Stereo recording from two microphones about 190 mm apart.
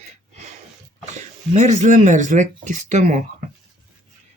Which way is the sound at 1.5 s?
40° right (ahead or behind).